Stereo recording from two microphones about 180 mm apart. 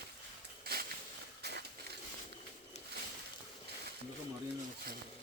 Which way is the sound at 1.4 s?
65° right (ahead or behind).